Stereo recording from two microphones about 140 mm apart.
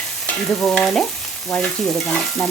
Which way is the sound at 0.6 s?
5° left (ahead or behind).